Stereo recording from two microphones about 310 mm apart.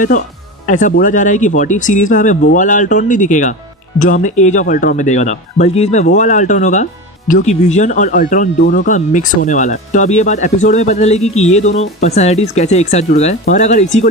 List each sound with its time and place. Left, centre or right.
0.7 s speech: left